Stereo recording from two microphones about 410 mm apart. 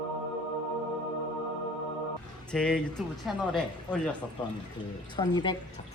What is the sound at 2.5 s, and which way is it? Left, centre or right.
Speech, centre.